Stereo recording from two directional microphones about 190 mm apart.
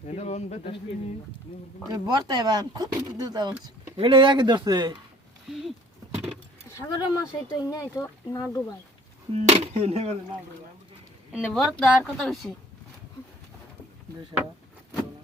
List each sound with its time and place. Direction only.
0.1 s speech: 35° left (ahead or behind)
1.9 s speech: 20° right (ahead or behind)
5.5 s a woman's voice: centre (ahead or behind)
6.7 s speech: 20° left (ahead or behind)
9.3 s speech: 35° right (ahead or behind)
11.3 s a woman's voice: centre (ahead or behind)